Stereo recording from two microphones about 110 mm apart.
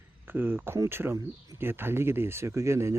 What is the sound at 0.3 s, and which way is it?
Speech, 20° right (ahead or behind).